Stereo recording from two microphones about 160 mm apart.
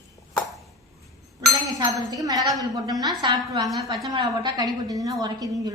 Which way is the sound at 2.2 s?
20° right (ahead or behind).